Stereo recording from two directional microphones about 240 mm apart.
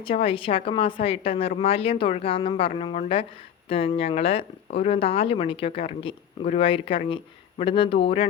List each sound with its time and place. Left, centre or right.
0.0 s speech: left